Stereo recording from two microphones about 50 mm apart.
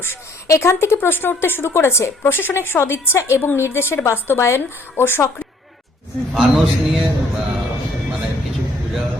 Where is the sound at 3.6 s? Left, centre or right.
Left.